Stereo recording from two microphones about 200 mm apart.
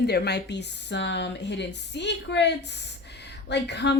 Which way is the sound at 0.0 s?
55° left (ahead or behind).